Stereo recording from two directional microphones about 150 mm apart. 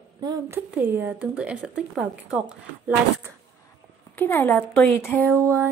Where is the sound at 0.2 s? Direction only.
25° right (ahead or behind).